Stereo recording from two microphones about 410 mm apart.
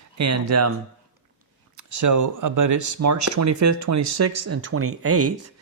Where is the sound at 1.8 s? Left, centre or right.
Right.